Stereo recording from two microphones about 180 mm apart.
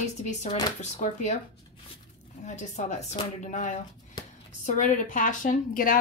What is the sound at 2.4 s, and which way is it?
A woman's voice, 40° left (ahead or behind).